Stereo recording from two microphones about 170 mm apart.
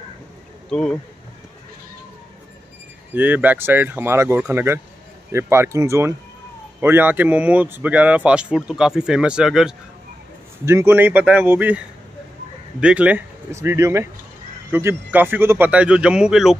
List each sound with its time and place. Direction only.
0.7 s speech: 5° left (ahead or behind)
3.2 s speech: 10° right (ahead or behind)
10.6 s speech: 15° right (ahead or behind)
12.8 s speech: 5° right (ahead or behind)